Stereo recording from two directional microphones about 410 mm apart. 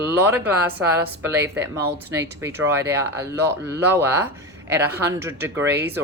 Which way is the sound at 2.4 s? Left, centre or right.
Centre.